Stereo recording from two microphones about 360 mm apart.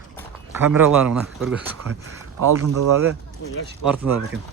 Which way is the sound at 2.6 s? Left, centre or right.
Right.